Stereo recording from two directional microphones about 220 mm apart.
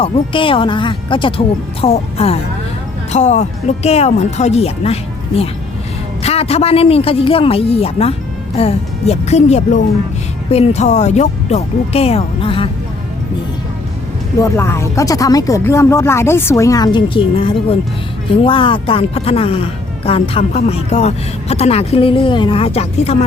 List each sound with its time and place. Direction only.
0.0 s speech: 25° left (ahead or behind)
6.2 s speech: 25° left (ahead or behind)
14.3 s speech: 15° left (ahead or behind); by 23.1 s 30° left (ahead or behind)